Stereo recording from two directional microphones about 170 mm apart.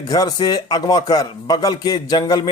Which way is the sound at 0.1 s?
20° left (ahead or behind).